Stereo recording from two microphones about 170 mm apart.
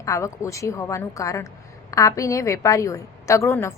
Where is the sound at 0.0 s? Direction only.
15° left (ahead or behind).